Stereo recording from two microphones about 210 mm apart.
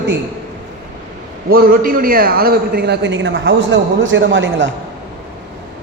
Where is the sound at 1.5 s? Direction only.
45° right (ahead or behind); by 4.7 s 60° right (ahead or behind).